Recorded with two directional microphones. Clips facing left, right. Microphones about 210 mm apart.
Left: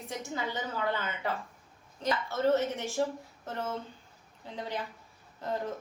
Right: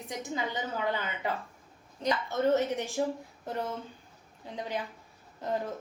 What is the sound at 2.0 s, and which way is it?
A woman's voice, 15° right (ahead or behind).